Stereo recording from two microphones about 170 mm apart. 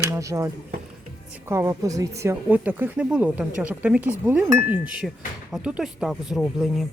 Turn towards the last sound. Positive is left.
turn(degrees=0)  # may be behind; listen again after turning